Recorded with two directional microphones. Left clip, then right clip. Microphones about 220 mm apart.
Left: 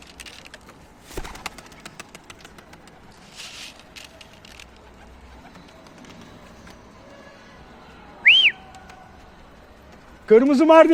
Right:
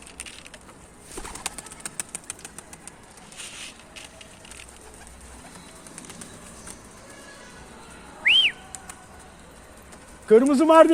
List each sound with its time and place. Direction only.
1.3 s bird: 20° left (ahead or behind)
1.8 s engine: centre (ahead or behind)
3.3 s a sound: 20° left (ahead or behind)
8.2 s whistle: 15° left (ahead or behind)
10.2 s a man's voice: 15° left (ahead or behind)